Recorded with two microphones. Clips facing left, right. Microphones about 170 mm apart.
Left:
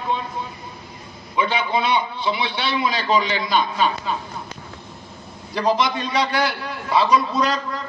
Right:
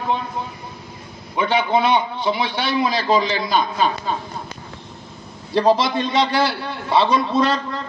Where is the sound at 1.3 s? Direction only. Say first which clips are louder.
Right 3 dB; 55° right (ahead or behind).